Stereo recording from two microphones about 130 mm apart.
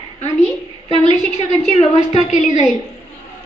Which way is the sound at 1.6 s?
60° left (ahead or behind).